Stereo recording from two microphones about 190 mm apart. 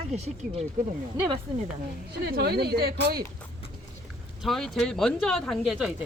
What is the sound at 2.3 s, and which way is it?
Speech, 55° right (ahead or behind).